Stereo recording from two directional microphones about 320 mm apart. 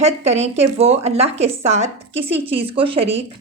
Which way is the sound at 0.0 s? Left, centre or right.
Right.